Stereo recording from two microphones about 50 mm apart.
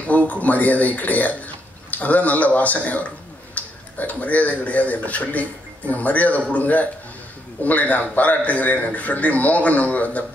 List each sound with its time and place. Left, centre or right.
0.0 s a man's voice: left